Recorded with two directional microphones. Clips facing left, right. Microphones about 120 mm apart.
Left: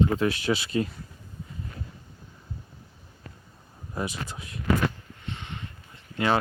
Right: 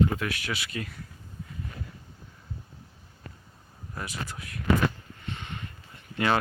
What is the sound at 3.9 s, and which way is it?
Speech, 20° left (ahead or behind).